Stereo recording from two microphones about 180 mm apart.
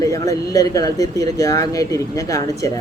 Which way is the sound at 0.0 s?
20° left (ahead or behind).